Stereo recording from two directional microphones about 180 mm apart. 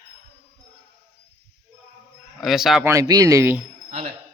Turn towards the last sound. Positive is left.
turn(degrees=-15)  # may be behind; listen again after turning